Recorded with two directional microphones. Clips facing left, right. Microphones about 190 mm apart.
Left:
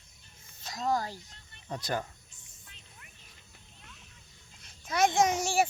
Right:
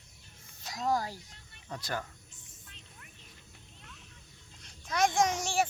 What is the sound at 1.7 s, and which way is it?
Speech, 20° left (ahead or behind).